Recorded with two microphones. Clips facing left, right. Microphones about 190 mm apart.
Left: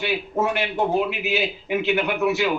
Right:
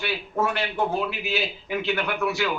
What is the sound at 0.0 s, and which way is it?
A man's voice, 20° left (ahead or behind).